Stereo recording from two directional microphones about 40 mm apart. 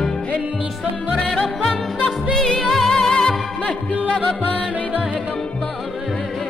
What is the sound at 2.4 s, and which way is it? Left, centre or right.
Music, centre.